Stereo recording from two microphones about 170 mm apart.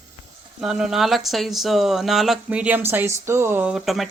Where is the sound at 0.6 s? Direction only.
5° right (ahead or behind).